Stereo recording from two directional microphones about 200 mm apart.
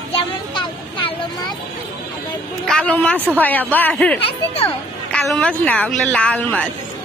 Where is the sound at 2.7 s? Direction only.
5° left (ahead or behind).